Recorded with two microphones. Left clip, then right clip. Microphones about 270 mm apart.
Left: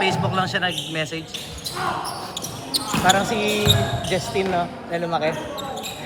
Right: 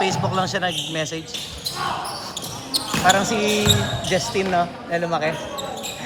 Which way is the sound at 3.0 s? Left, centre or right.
Right.